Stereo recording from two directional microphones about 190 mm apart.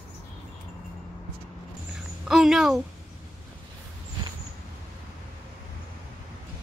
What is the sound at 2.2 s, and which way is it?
Speech, centre (ahead or behind).